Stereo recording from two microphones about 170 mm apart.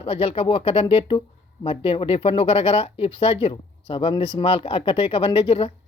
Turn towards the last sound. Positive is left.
turn(degrees=30)  # may be behind; listen again after turning